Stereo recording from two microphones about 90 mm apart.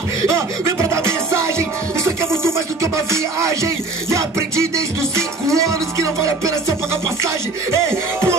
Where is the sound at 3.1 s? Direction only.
35° right (ahead or behind).